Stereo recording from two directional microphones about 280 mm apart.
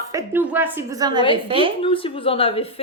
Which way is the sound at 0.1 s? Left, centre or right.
Centre.